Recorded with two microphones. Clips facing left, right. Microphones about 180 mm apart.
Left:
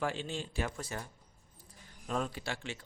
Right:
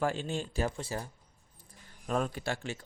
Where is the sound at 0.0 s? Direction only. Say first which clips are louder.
Right 4 dB; 45° right (ahead or behind).